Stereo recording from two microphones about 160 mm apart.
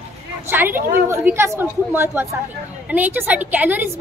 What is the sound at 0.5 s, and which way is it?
A woman's voice, 15° right (ahead or behind).